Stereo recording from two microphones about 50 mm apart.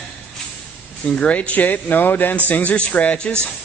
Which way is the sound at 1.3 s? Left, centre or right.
Left.